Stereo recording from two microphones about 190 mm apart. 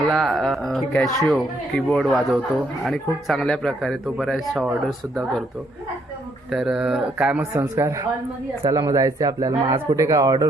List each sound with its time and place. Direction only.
0.1 s a man's voice: centre (ahead or behind)
6.5 s a man's voice: centre (ahead or behind); by 10.4 s 20° right (ahead or behind)